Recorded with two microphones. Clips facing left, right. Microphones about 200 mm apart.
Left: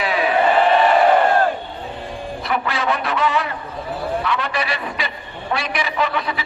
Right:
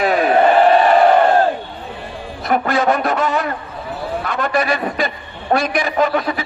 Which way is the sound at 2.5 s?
45° right (ahead or behind).